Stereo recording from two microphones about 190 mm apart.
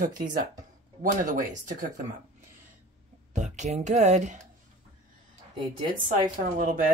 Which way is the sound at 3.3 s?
40° right (ahead or behind).